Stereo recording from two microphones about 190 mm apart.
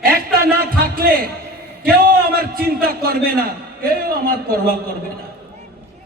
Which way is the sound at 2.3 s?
55° right (ahead or behind).